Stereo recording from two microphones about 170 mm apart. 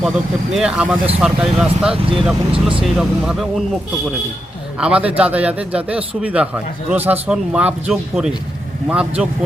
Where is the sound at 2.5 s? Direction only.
30° right (ahead or behind).